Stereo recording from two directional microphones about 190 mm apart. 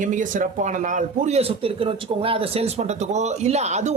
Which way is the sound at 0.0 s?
40° right (ahead or behind).